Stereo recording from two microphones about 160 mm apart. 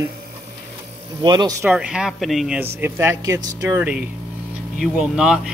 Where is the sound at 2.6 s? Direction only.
15° right (ahead or behind).